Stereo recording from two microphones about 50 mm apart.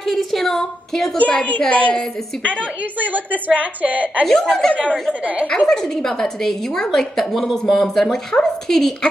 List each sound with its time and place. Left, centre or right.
0.0 s a woman's voice: centre
1.1 s a woman's voice: left
2.8 s a woman's voice: right
4.3 s a woman's voice: centre
5.2 s a woman's voice: right
5.7 s a woman's voice: centre